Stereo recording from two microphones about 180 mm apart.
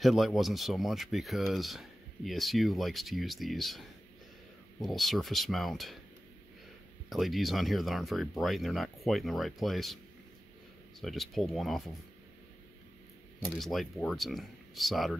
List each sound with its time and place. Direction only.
0.0 s speech: centre (ahead or behind)
4.8 s speech: centre (ahead or behind)
7.1 s speech: centre (ahead or behind)
11.0 s speech: centre (ahead or behind)
13.5 s speech: centre (ahead or behind)